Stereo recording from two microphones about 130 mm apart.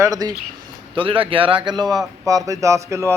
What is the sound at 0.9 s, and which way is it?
A man's voice, 45° right (ahead or behind).